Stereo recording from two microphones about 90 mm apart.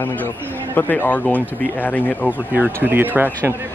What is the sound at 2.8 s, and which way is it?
Speech, 20° right (ahead or behind).